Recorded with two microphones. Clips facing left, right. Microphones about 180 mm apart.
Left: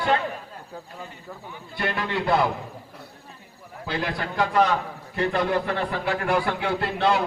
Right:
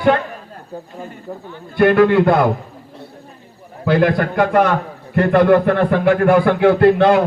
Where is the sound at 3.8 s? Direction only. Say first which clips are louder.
Right 14 dB; 55° right (ahead or behind).